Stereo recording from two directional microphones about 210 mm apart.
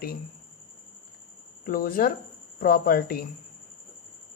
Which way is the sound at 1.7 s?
45° left (ahead or behind).